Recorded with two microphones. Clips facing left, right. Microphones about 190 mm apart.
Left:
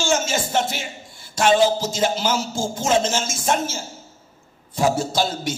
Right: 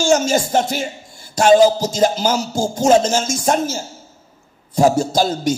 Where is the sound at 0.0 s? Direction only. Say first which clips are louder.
Right 6 dB; 40° right (ahead or behind).